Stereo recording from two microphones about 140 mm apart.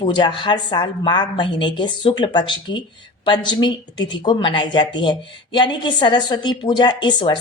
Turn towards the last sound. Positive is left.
turn(degrees=35)  # may be behind; listen again after turning